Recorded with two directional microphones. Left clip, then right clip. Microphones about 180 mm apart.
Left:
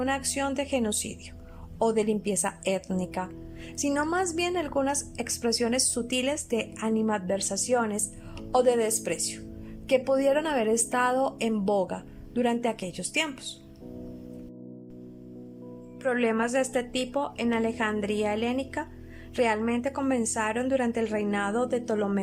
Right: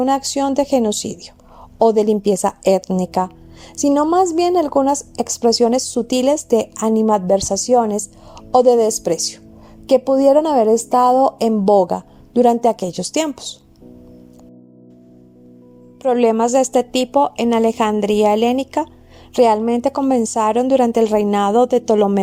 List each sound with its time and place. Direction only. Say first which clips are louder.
0.0 s a woman's voice: right 11 dB; 30° right (ahead or behind)
16.0 s a woman's voice: right 12 dB; 25° right (ahead or behind)